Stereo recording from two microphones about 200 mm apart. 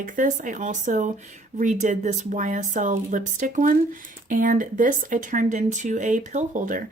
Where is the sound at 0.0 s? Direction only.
40° right (ahead or behind).